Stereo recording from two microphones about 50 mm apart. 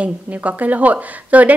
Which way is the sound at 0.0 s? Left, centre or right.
Right.